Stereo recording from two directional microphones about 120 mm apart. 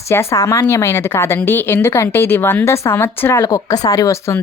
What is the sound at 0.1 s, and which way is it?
Speech, 20° left (ahead or behind).